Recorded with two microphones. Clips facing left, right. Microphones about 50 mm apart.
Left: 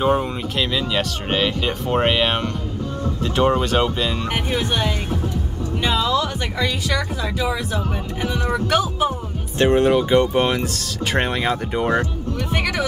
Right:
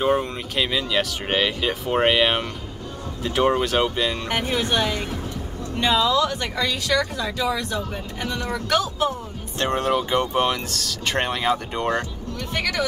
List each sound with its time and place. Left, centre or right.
0.0 s speech: centre